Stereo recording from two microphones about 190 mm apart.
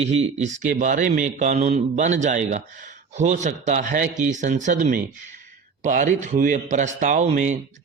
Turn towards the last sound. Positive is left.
turn(degrees=-40)  # may be behind; listen again after turning